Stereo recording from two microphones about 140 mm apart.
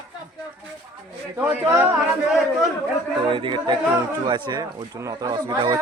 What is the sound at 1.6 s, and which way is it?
Speech, 20° right (ahead or behind).